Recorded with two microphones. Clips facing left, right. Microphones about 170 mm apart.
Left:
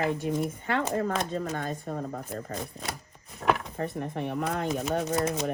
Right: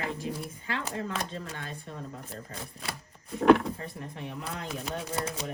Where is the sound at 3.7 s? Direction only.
60° left (ahead or behind).